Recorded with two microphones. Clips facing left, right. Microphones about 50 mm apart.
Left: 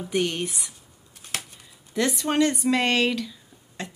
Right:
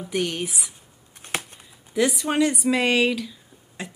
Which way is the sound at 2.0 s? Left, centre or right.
Centre.